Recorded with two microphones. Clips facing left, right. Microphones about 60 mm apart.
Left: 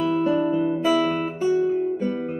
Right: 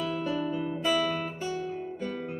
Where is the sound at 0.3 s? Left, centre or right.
Left.